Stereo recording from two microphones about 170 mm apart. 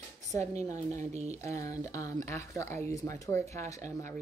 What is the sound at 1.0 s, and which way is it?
Speech, 40° right (ahead or behind).